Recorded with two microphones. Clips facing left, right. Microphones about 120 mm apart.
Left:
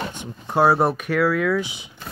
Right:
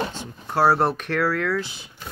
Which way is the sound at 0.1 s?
15° left (ahead or behind).